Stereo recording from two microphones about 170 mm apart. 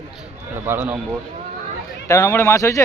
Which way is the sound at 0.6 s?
15° right (ahead or behind).